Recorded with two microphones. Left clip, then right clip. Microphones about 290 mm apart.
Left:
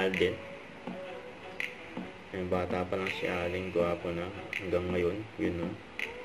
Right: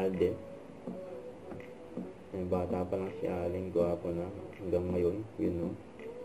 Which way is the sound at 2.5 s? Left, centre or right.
Left.